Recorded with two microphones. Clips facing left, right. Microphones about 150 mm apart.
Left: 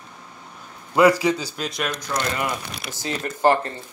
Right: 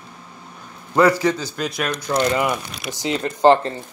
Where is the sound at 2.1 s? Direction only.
20° right (ahead or behind).